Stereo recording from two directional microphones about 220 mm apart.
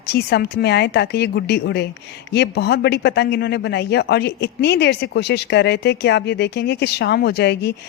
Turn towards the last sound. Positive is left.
turn(degrees=50)  # may be behind; listen again after turning